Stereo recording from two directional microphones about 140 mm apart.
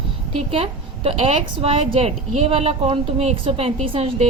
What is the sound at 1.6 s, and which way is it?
A woman's voice, 45° right (ahead or behind).